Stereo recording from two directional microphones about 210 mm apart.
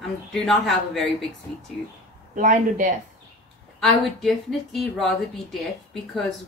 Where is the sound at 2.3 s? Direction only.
40° right (ahead or behind).